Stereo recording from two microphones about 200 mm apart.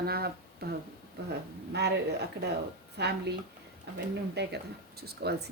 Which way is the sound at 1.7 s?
55° right (ahead or behind).